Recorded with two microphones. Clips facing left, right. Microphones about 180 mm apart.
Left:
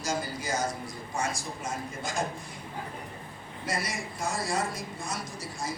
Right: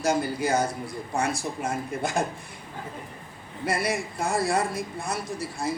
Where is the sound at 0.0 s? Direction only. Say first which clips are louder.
Right 8 dB; 60° right (ahead or behind).